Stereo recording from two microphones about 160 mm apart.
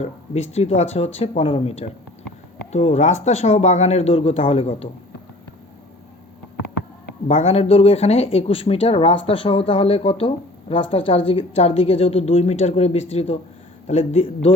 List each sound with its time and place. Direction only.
0.0 s speech: 45° left (ahead or behind)
7.3 s speech: 40° left (ahead or behind)